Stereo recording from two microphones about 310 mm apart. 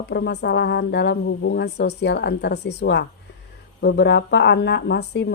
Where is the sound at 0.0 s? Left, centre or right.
Left.